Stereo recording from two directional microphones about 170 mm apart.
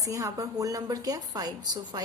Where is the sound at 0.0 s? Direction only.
20° right (ahead or behind).